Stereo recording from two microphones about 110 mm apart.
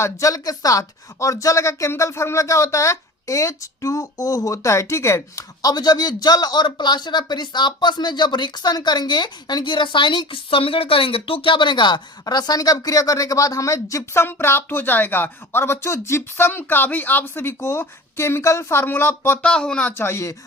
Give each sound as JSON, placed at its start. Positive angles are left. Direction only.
{"t": 0.0, "sound": "speech", "side_deg": 30}
{"t": 19.5, "sound": "speech", "side_deg": 5}
{"t": 19.9, "sound": "speech", "side_deg": 20}